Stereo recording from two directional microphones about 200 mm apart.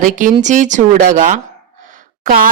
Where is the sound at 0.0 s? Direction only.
40° right (ahead or behind).